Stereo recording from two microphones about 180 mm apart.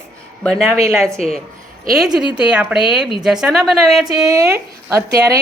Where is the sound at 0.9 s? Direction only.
Centre (ahead or behind).